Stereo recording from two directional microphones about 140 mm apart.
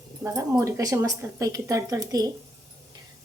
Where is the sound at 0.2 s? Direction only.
20° right (ahead or behind).